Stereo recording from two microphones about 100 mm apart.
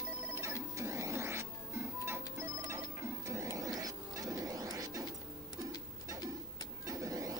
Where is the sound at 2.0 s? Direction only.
25° right (ahead or behind).